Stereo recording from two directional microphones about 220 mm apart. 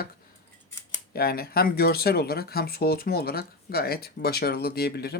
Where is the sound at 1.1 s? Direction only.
45° left (ahead or behind).